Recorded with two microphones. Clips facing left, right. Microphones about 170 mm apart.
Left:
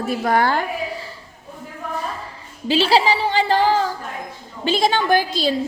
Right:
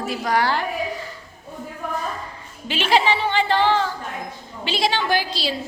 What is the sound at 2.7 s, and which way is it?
A woman's voice, 35° left (ahead or behind).